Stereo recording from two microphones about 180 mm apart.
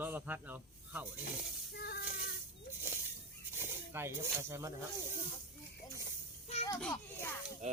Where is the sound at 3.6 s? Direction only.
15° right (ahead or behind).